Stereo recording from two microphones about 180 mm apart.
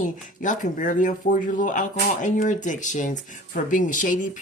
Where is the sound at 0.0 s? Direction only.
45° left (ahead or behind).